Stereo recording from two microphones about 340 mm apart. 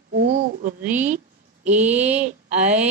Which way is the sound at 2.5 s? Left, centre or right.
Centre.